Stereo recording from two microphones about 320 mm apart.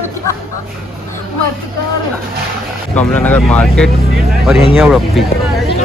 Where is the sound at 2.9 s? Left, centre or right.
Centre.